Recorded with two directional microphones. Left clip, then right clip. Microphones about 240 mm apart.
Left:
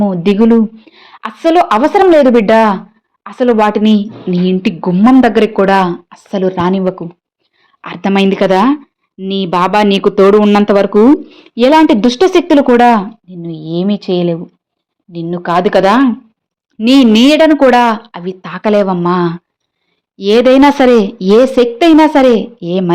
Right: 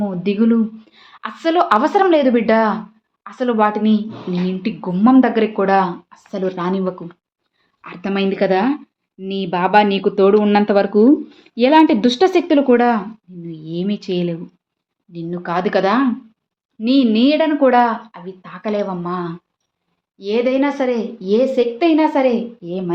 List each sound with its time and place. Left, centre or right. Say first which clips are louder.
0.0 s speech: left 8 dB; left
7.8 s speech: left 9 dB; left